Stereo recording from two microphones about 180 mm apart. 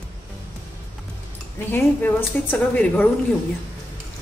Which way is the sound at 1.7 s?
10° left (ahead or behind).